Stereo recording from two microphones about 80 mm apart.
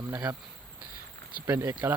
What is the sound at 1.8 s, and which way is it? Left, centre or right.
Speech, right.